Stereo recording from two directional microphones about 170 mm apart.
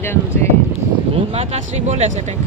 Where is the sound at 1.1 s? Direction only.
35° right (ahead or behind).